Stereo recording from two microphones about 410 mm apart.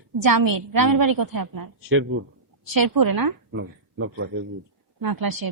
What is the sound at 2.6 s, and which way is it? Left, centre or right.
Speech, right.